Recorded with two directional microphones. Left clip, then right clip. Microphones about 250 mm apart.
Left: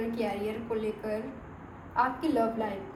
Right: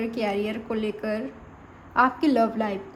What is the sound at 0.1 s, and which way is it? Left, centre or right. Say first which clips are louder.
A woman's voice: right 5 dB; right.